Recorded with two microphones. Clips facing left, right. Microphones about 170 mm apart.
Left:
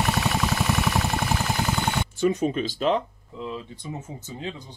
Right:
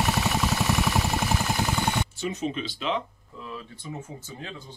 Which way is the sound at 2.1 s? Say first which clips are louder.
Left 7 dB; 50° left (ahead or behind).